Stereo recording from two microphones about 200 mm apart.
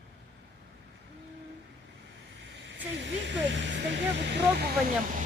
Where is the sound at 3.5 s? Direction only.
65° right (ahead or behind).